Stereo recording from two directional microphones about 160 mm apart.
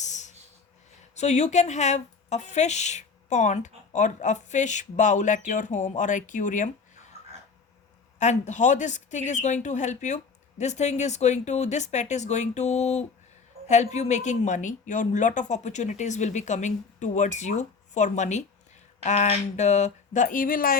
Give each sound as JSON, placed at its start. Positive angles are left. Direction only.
{"t": 0.0, "sound": "snort", "side_deg": 50}
{"t": 1.1, "sound": "a woman's voice", "side_deg": 45}
{"t": 8.2, "sound": "a woman's voice", "side_deg": 50}